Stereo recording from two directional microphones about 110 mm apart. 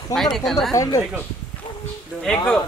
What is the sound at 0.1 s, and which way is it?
Speech, 5° left (ahead or behind).